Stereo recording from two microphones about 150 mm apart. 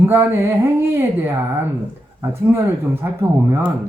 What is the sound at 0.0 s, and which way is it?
Speech, 15° right (ahead or behind).